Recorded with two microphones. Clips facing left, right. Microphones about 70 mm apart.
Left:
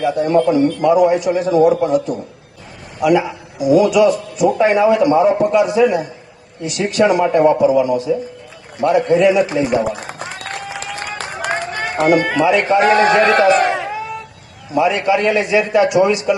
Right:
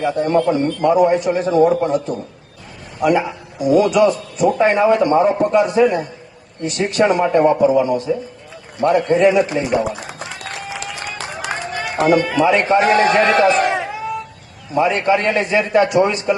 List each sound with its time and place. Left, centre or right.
0.0 s a man's voice: right
9.8 s run: left
12.8 s a man's voice: left
14.8 s a man's voice: right